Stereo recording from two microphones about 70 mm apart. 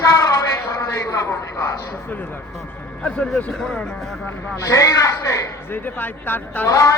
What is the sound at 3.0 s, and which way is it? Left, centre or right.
Speech, centre.